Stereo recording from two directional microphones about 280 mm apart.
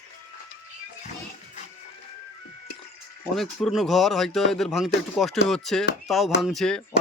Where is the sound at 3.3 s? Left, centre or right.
Centre.